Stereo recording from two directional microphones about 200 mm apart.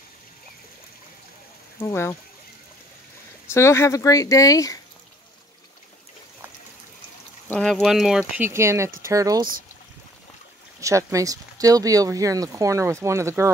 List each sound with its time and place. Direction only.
1.8 s speech: 15° left (ahead or behind)
3.5 s speech: 15° left (ahead or behind)
7.4 s speech: 5° left (ahead or behind); by 9.5 s 15° right (ahead or behind)
10.8 s speech: 15° right (ahead or behind)